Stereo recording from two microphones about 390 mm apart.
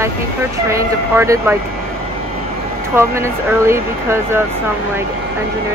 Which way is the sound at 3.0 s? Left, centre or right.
Centre.